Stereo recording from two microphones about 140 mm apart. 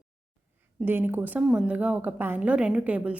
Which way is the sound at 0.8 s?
15° right (ahead or behind).